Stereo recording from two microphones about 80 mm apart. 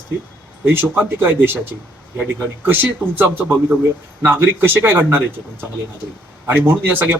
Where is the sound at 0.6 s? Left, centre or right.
Right.